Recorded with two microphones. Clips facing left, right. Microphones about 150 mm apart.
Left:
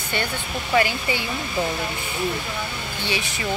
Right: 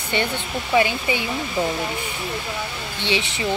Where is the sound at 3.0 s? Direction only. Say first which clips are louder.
Right 4 dB; 25° right (ahead or behind).